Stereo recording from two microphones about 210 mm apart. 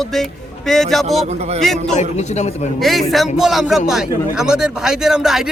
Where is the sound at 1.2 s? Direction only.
30° right (ahead or behind).